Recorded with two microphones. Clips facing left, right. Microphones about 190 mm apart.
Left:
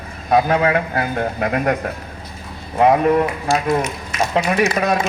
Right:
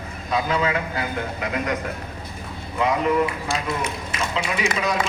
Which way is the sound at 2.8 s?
55° left (ahead or behind).